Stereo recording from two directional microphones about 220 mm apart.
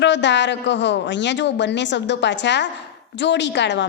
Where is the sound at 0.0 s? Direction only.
55° left (ahead or behind).